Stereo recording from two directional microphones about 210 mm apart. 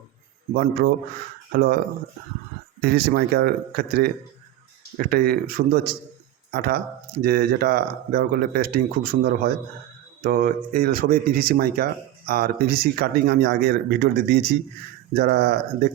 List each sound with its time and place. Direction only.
0.5 s speech: 45° right (ahead or behind)
2.8 s speech: 45° right (ahead or behind)